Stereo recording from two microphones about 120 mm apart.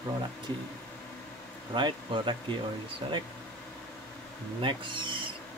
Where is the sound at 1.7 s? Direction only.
40° right (ahead or behind).